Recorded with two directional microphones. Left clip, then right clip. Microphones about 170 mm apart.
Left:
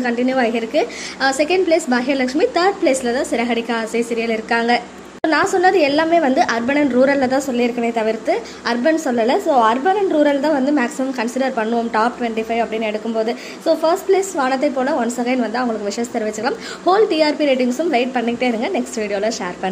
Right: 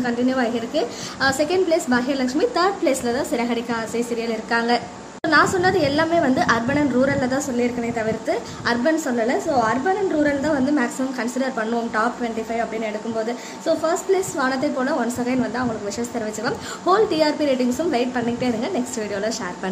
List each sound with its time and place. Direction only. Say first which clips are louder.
0.0 s a woman's voice: left 4 dB; 15° left (ahead or behind)
8.6 s a woman's voice: left 3 dB; 15° left (ahead or behind)